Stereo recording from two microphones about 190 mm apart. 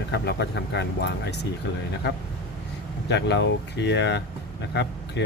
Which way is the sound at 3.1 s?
65° left (ahead or behind).